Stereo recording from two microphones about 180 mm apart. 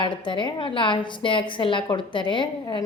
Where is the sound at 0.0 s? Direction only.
25° left (ahead or behind).